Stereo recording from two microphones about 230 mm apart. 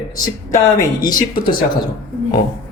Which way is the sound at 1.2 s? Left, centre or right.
Left.